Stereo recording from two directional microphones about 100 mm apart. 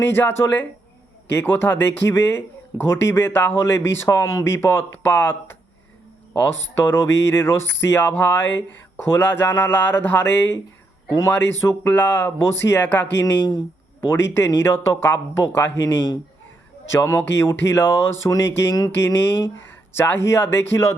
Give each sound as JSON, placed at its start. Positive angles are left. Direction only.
{"t": 0.1, "sound": "speech", "side_deg": 20}
{"t": 16.9, "sound": "speech", "side_deg": 30}